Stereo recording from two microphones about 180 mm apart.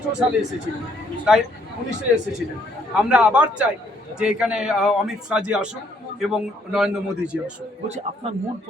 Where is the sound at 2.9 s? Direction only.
5° right (ahead or behind).